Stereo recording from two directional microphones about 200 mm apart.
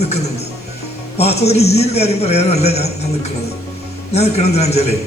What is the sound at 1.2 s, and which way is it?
A man's voice, 30° left (ahead or behind).